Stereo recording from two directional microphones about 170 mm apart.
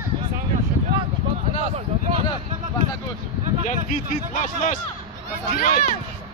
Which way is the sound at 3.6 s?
45° left (ahead or behind).